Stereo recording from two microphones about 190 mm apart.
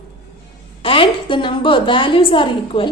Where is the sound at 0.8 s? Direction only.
25° left (ahead or behind).